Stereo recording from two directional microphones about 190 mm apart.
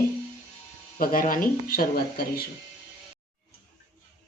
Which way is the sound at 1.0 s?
50° left (ahead or behind).